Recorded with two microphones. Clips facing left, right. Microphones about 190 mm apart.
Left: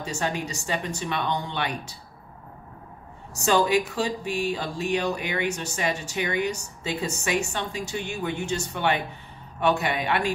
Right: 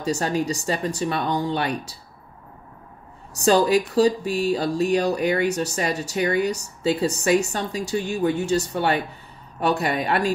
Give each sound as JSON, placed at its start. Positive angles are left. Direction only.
{"t": 0.0, "sound": "speech", "side_deg": -40}
{"t": 3.3, "sound": "speech", "side_deg": -35}